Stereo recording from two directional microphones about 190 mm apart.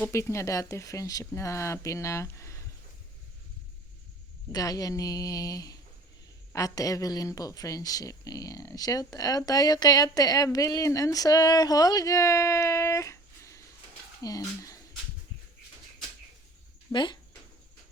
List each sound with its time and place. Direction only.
0.0 s speech: 15° left (ahead or behind)
4.5 s speech: 20° left (ahead or behind)
16.9 s speech: 25° left (ahead or behind)